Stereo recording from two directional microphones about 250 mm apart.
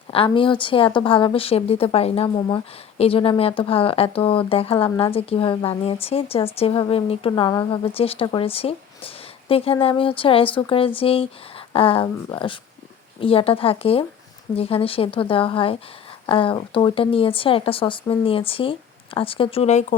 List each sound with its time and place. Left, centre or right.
0.1 s speech: left